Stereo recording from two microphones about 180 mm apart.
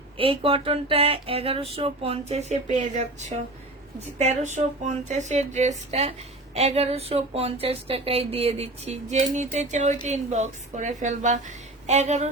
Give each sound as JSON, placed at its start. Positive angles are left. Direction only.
{"t": 0.2, "sound": "speech", "side_deg": -30}